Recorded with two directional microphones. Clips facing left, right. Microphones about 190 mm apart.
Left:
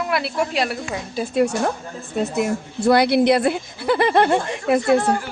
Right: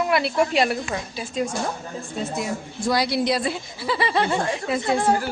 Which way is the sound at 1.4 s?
65° left (ahead or behind).